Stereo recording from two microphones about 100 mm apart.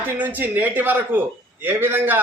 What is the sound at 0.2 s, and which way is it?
A man's voice, 15° right (ahead or behind).